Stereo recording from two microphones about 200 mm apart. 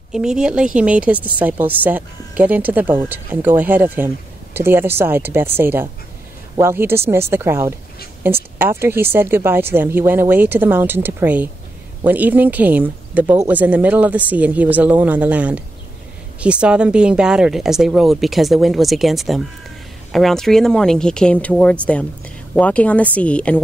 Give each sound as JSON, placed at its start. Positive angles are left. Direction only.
{"t": 0.1, "sound": "a woman's voice", "side_deg": -5}